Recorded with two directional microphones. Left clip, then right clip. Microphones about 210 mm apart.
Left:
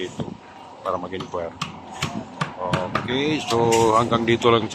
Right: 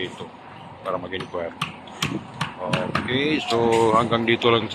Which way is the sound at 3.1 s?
Centre (ahead or behind).